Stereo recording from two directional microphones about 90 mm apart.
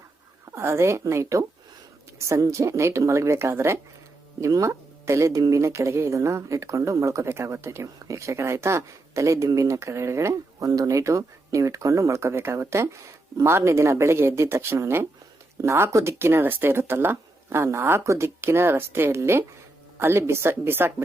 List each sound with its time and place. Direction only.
0.4 s speech: 30° right (ahead or behind)